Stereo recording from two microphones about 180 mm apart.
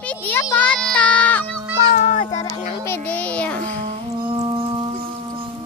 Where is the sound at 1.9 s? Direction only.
45° left (ahead or behind).